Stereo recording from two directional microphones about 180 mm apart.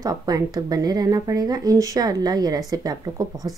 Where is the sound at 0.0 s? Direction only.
20° right (ahead or behind).